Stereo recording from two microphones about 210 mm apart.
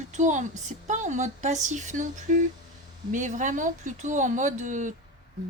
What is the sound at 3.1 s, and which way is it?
Speech, 35° right (ahead or behind).